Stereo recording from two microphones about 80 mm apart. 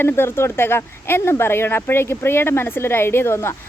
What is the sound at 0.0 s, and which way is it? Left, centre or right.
Speech, left.